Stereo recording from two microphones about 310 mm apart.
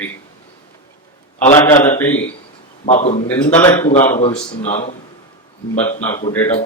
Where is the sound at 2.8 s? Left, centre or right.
Left.